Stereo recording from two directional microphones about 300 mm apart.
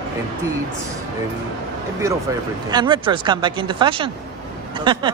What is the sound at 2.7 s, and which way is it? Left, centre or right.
Speech, centre.